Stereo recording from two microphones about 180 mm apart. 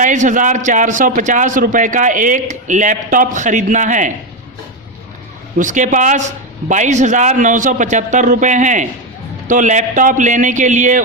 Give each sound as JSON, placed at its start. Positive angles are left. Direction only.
{"t": 0.0, "sound": "a man's voice", "side_deg": -45}
{"t": 5.5, "sound": "a man's voice", "side_deg": -45}